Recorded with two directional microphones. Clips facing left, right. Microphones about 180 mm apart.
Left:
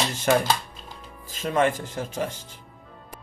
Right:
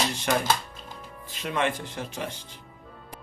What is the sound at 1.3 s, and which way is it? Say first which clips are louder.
Speech: left 5 dB; 45° left (ahead or behind).